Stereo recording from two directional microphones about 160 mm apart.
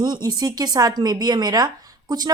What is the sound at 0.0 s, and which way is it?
A woman's voice, 25° right (ahead or behind).